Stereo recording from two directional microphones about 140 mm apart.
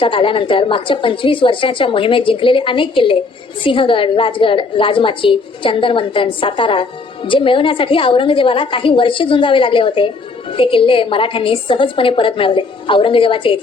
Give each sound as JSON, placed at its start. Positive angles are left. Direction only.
{"t": 0.0, "sound": "a woman's voice", "side_deg": 40}